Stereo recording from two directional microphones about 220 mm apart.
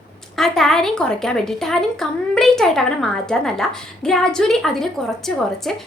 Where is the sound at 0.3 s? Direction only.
Centre (ahead or behind).